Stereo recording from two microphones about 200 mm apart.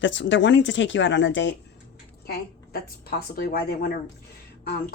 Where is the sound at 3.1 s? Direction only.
50° left (ahead or behind).